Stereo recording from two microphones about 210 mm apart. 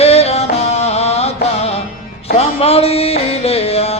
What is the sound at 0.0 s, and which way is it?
Music, 30° left (ahead or behind).